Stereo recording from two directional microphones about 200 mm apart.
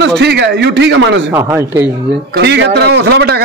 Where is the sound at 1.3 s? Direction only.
10° right (ahead or behind).